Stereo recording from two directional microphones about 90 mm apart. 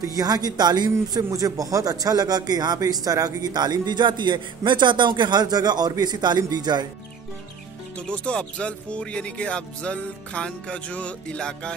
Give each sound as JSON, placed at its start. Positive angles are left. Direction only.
{"t": 0.0, "sound": "a man's voice", "side_deg": -45}
{"t": 8.1, "sound": "speech", "side_deg": 10}